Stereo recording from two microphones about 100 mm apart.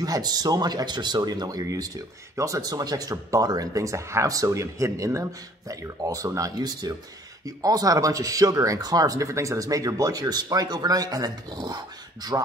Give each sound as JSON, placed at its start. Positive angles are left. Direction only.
{"t": 0.0, "sound": "speech", "side_deg": -40}